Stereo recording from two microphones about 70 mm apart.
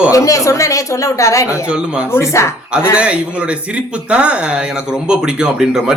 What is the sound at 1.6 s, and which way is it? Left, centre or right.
Speech, centre.